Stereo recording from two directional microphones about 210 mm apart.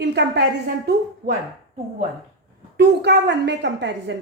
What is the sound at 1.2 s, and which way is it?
Speech, 40° right (ahead or behind).